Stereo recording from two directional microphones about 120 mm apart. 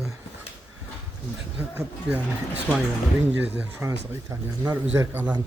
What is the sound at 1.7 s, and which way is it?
Speech, 10° right (ahead or behind).